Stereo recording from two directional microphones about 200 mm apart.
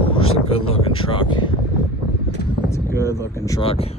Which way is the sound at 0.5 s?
30° left (ahead or behind).